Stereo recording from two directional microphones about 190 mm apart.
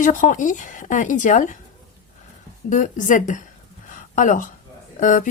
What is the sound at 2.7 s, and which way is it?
Speech, 40° left (ahead or behind).